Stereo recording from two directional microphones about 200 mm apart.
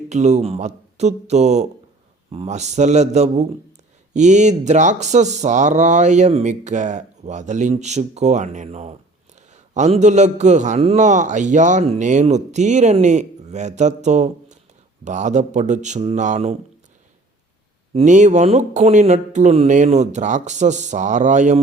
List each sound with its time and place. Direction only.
0.1 s speech: 35° right (ahead or behind)
17.9 s speech: 35° right (ahead or behind)